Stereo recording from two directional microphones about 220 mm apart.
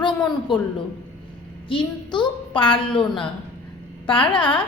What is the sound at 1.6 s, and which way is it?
A woman's voice, 20° left (ahead or behind).